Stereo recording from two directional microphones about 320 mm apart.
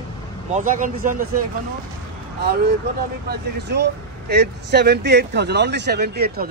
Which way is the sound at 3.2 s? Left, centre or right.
Right.